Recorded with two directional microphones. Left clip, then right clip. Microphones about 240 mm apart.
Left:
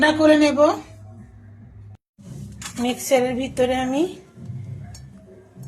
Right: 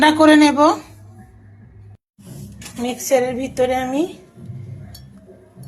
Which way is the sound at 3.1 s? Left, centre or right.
Centre.